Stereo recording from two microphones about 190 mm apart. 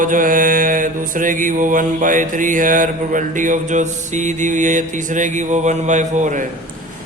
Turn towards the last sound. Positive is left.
turn(degrees=-40)  # may be behind; listen again after turning